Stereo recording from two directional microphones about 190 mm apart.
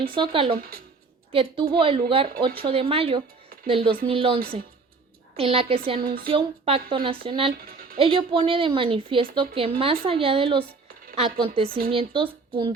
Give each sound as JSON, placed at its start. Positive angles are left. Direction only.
{"t": 0.0, "sound": "a woman's voice", "side_deg": -30}
{"t": 6.0, "sound": "speech", "side_deg": -50}
{"t": 6.2, "sound": "a woman's voice", "side_deg": -30}
{"t": 7.5, "sound": "a sound", "side_deg": -50}
{"t": 7.9, "sound": "a woman's voice", "side_deg": -30}